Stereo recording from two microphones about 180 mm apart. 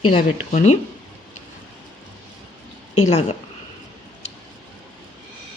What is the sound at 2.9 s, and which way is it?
Speech, 35° left (ahead or behind).